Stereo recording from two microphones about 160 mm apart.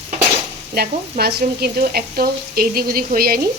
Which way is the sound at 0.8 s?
85° right.